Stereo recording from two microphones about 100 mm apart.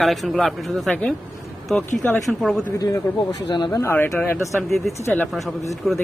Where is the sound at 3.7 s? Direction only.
25° left (ahead or behind).